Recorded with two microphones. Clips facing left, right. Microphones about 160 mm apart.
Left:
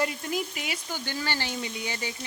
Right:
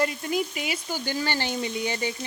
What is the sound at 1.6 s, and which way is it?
Frying, 30° right (ahead or behind).